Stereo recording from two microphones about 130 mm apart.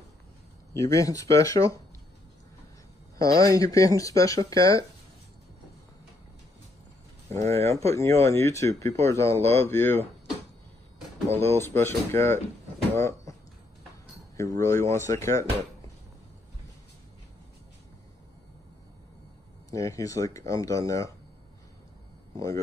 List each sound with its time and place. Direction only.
0.8 s speech: 25° left (ahead or behind)
3.2 s speech: 25° left (ahead or behind)
7.3 s speech: 20° left (ahead or behind)
11.4 s speech: 20° left (ahead or behind)
12.9 s a sound: 25° left (ahead or behind)
14.3 s speech: 25° left (ahead or behind)
19.7 s speech: 25° left (ahead or behind)